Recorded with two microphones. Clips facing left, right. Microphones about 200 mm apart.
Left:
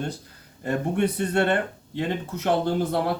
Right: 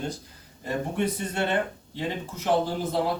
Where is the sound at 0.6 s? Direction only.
60° left (ahead or behind).